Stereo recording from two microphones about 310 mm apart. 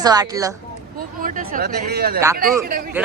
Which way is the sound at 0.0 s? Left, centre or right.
Centre.